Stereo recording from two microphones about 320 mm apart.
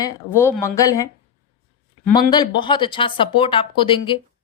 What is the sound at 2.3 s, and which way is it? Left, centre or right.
A woman's voice, centre.